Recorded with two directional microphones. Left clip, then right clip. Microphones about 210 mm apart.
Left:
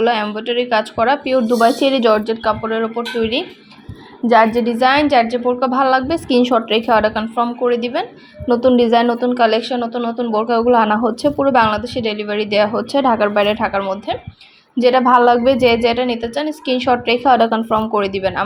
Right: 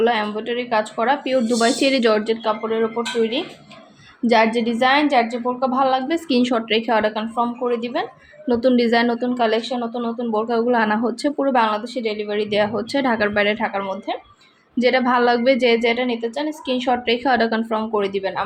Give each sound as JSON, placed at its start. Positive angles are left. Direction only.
{"t": 0.0, "sound": "a woman's voice", "side_deg": 25}
{"t": 4.3, "sound": "a woman's voice", "side_deg": 10}
{"t": 8.4, "sound": "a woman's voice", "side_deg": 10}
{"t": 12.9, "sound": "speech", "side_deg": 10}
{"t": 14.8, "sound": "a woman's voice", "side_deg": 15}
{"t": 17.2, "sound": "speech", "side_deg": 10}
{"t": 17.9, "sound": "a woman's voice", "side_deg": 25}